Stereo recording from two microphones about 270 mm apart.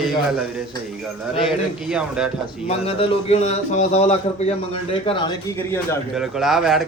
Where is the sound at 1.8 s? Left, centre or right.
Centre.